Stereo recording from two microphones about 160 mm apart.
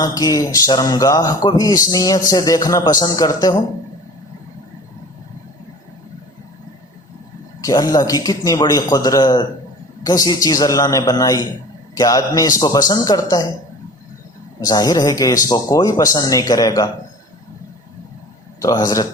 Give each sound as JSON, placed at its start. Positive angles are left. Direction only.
{"t": 0.0, "sound": "a man's voice", "side_deg": 25}
{"t": 7.6, "sound": "a man's voice", "side_deg": 20}
{"t": 14.7, "sound": "a man's voice", "side_deg": 25}
{"t": 18.6, "sound": "a man's voice", "side_deg": 25}